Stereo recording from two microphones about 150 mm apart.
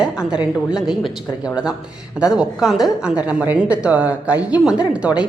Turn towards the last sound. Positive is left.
turn(degrees=-10)  # may be behind; listen again after turning